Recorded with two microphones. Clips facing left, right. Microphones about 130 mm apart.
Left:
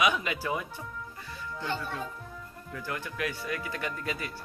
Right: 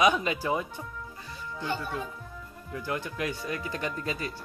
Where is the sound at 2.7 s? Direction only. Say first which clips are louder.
Right 4 dB; 20° right (ahead or behind).